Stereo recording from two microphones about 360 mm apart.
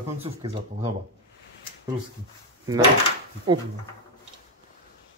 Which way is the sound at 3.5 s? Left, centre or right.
Centre.